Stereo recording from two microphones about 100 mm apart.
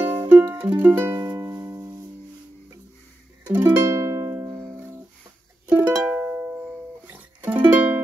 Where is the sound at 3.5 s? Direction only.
25° right (ahead or behind).